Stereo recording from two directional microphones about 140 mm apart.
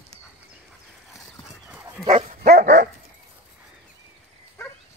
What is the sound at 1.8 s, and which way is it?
Dog, 20° right (ahead or behind).